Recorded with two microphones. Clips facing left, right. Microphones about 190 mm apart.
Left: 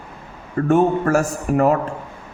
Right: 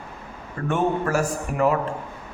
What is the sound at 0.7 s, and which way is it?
A man's voice, 45° left (ahead or behind).